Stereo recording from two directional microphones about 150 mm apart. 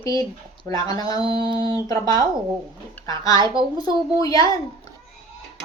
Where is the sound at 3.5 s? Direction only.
35° right (ahead or behind).